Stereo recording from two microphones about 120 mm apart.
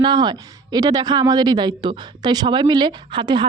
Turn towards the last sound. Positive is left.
turn(degrees=-40)  # may be behind; listen again after turning